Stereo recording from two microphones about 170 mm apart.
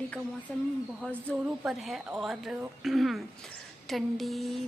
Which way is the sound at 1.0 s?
5° right (ahead or behind).